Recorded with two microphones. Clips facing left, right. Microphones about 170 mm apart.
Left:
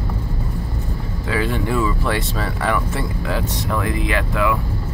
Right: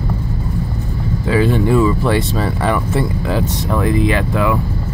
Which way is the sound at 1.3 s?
25° right (ahead or behind).